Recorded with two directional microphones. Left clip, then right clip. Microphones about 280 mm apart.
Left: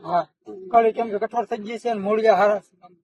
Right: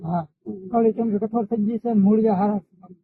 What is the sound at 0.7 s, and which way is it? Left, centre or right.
Speech, left.